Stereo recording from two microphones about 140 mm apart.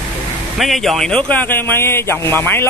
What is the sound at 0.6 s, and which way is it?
A man's voice, centre (ahead or behind).